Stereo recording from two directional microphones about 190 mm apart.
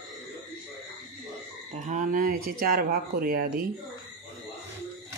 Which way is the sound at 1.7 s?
40° right (ahead or behind).